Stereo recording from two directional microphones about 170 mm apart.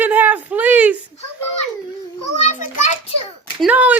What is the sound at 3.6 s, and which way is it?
Speech, 10° right (ahead or behind).